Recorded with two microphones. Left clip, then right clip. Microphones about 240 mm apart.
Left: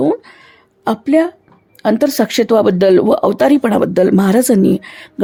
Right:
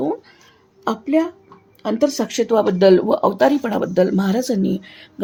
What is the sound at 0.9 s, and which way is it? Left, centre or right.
Speech, left.